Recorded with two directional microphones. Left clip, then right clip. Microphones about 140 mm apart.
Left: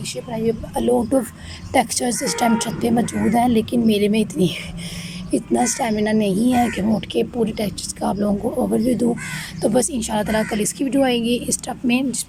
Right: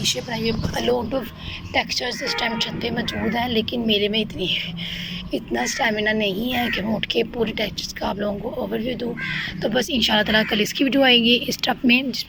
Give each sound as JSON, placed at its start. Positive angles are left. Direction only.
{"t": 0.3, "sound": "speech", "side_deg": 25}
{"t": 1.7, "sound": "speech", "side_deg": 50}
{"t": 3.3, "sound": "speech", "side_deg": 30}